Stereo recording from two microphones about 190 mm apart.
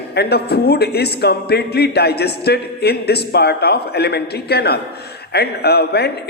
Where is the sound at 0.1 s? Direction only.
60° left (ahead or behind).